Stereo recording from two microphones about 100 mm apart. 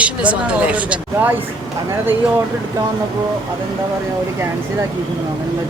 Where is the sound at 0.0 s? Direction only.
15° right (ahead or behind).